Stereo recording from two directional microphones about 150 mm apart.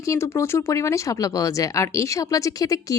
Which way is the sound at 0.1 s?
20° left (ahead or behind).